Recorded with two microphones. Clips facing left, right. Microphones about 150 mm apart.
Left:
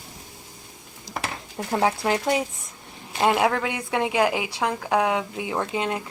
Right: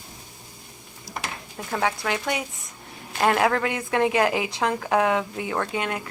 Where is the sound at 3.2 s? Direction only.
15° left (ahead or behind).